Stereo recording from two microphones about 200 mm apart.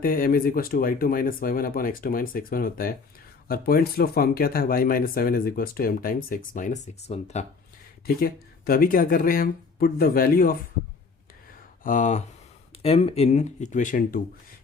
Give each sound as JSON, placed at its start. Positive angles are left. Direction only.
{"t": 0.0, "sound": "speech", "side_deg": 45}
{"t": 8.0, "sound": "speech", "side_deg": 50}
{"t": 11.8, "sound": "speech", "side_deg": 40}